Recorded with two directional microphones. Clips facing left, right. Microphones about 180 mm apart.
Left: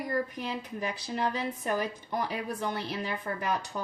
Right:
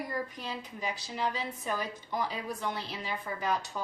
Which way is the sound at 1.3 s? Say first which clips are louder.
Left 4 dB; 55° left (ahead or behind).